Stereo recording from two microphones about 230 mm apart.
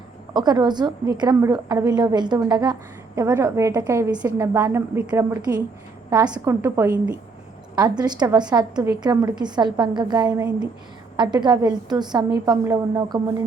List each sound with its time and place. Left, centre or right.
0.3 s a woman's voice: centre
7.8 s a woman's voice: centre